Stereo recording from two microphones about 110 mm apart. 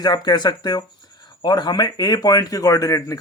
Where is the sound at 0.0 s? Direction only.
40° left (ahead or behind).